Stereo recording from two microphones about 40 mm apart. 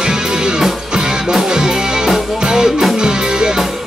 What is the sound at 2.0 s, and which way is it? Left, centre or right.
Music, centre.